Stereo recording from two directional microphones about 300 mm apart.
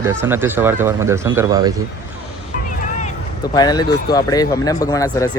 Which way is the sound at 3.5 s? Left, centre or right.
Centre.